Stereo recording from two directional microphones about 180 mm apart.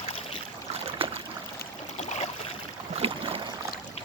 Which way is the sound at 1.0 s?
30° right (ahead or behind).